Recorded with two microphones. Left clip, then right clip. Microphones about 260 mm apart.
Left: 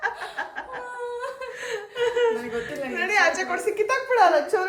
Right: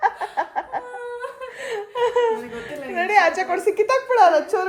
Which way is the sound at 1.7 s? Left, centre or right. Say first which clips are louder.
Right 4 dB; right.